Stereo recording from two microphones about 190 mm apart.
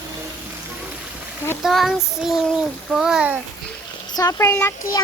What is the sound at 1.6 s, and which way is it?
Child singing, centre (ahead or behind).